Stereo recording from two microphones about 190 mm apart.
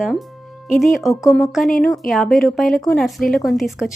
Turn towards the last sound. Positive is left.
turn(degrees=0)  # may be behind; listen again after turning